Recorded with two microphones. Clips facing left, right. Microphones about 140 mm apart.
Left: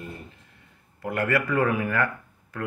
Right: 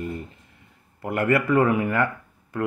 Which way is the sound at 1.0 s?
25° right (ahead or behind).